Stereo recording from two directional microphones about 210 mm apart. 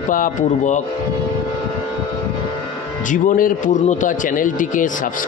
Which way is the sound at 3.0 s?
40° left (ahead or behind).